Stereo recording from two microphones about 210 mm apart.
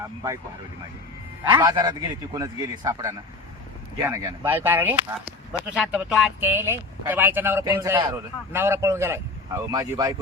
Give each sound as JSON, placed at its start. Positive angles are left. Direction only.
{"t": 1.5, "sound": "a man's voice", "side_deg": -20}